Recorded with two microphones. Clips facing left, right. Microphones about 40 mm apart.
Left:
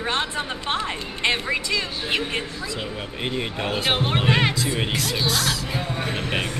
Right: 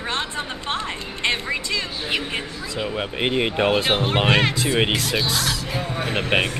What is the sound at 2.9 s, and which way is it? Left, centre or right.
Speech, right.